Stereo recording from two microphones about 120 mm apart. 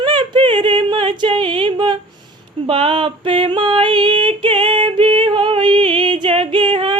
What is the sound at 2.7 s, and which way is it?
Female singing, 45° right (ahead or behind).